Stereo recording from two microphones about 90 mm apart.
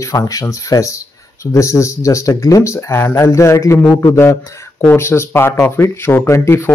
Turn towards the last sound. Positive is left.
turn(degrees=30)  # may be behind; listen again after turning